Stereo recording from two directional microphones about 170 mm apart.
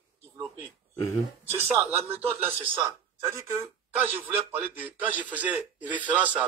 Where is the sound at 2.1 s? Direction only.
35° right (ahead or behind).